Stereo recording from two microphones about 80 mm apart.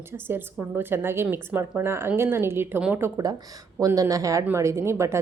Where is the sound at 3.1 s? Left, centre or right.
Right.